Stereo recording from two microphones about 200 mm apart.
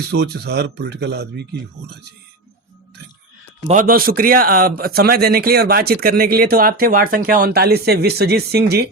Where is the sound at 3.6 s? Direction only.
40° right (ahead or behind).